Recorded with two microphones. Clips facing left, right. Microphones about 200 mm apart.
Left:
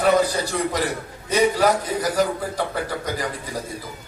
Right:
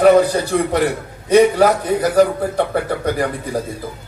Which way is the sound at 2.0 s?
60° right (ahead or behind).